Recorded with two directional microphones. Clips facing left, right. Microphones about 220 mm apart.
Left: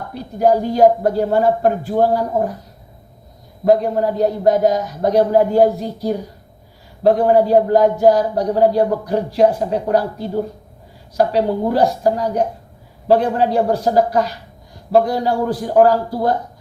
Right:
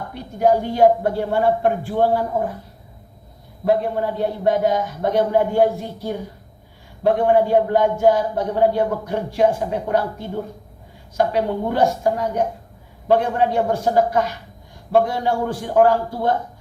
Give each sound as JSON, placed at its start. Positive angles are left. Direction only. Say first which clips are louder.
{"t": 0.1, "sound": "a man's voice", "louder": "left 2 dB", "side_deg": 35}
{"t": 3.7, "sound": "a man's voice", "louder": "left 5 dB", "side_deg": 40}